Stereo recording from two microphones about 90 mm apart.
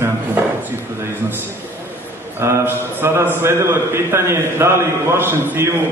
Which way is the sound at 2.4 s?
25° right (ahead or behind).